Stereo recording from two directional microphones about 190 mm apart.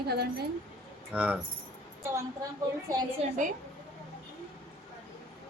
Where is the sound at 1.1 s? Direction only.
5° right (ahead or behind).